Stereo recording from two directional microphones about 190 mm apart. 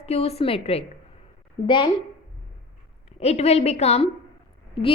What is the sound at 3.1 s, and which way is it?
Speech, 35° left (ahead or behind).